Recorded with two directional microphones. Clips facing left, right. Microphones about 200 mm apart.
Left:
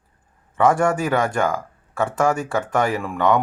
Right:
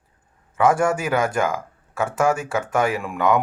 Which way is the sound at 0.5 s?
Centre (ahead or behind).